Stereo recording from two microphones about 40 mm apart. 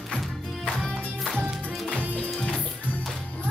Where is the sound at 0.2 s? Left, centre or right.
Centre.